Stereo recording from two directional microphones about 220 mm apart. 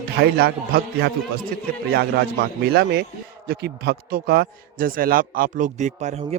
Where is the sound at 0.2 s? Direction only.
45° right (ahead or behind).